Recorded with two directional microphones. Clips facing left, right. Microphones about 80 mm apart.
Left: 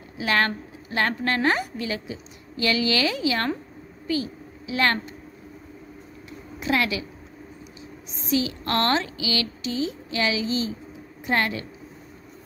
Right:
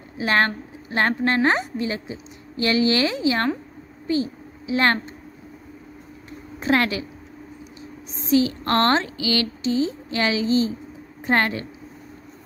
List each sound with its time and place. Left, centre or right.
0.2 s a woman's voice: right
6.6 s a woman's voice: right
8.1 s a woman's voice: right